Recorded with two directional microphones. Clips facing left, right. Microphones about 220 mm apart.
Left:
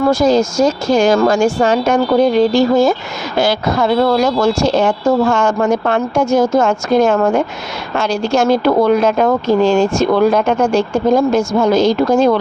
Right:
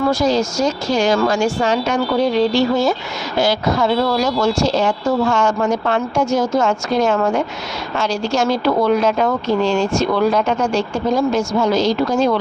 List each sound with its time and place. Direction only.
0.1 s speech: 50° left (ahead or behind)
3.3 s speech: 60° left (ahead or behind)